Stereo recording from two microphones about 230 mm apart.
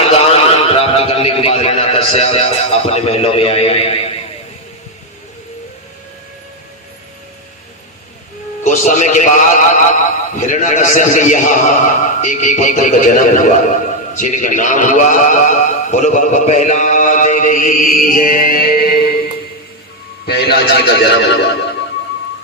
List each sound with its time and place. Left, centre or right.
0.0 s a sound: left
8.6 s a man's voice: left
20.2 s speech: left